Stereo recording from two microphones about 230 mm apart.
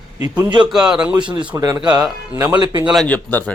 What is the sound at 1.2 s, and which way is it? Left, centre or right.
Speech, right.